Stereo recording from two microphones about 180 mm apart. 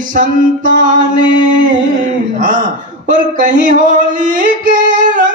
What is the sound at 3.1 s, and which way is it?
Singing, 45° right (ahead or behind).